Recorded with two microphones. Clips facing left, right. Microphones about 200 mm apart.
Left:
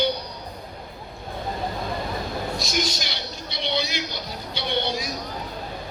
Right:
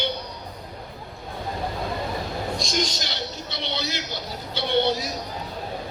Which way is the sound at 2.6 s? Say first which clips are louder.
Even; 10° left (ahead or behind).